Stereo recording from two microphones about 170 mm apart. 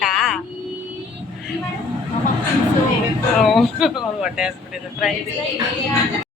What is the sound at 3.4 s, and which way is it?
A woman's voice, centre (ahead or behind).